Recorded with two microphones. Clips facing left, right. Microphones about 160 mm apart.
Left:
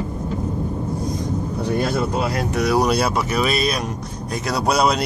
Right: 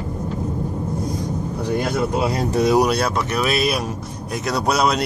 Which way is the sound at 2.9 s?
5° left (ahead or behind).